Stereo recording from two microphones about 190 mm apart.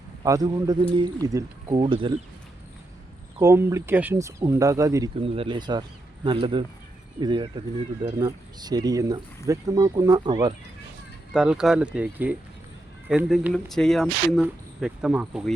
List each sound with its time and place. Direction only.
0.2 s speech: 20° right (ahead or behind)
3.3 s speech: 15° right (ahead or behind)
5.2 s speech: 30° right (ahead or behind)
11.3 s speech: 5° right (ahead or behind)